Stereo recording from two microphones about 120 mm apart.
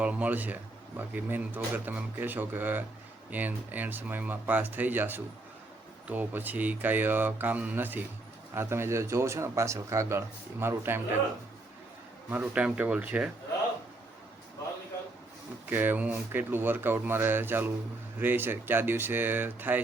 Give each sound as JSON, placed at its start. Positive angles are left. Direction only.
{"t": 0.0, "sound": "a man's voice", "side_deg": -10}
{"t": 12.3, "sound": "speech", "side_deg": -10}
{"t": 15.7, "sound": "speech", "side_deg": -15}